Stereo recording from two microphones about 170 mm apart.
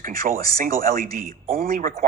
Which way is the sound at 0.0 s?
55° right (ahead or behind).